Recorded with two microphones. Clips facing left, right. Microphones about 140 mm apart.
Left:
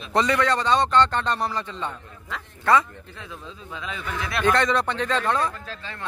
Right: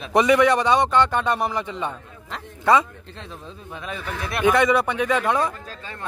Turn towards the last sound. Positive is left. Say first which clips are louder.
# right 3 dB
turn(degrees=-15)  # may be behind; listen again after turning